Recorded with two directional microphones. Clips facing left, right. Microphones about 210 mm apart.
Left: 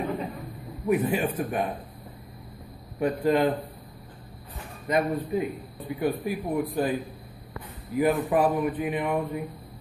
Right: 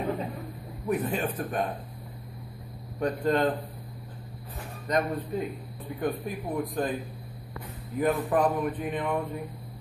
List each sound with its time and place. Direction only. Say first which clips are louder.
0.8 s speech: left 4 dB; 10° left (ahead or behind)
3.0 s speech: left 3 dB; 5° left (ahead or behind)
4.8 s speech: left 3 dB; 5° left (ahead or behind)